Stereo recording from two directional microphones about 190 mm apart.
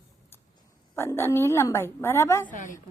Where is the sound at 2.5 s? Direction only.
40° left (ahead or behind).